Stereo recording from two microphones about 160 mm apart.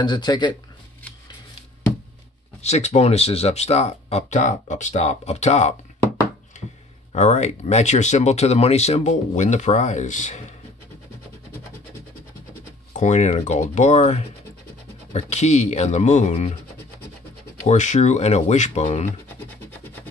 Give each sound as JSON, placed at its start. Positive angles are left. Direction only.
{"t": 0.0, "sound": "speech", "side_deg": 25}
{"t": 2.6, "sound": "speech", "side_deg": 40}
{"t": 7.1, "sound": "speech", "side_deg": 45}
{"t": 12.9, "sound": "speech", "side_deg": 45}
{"t": 17.6, "sound": "speech", "side_deg": 50}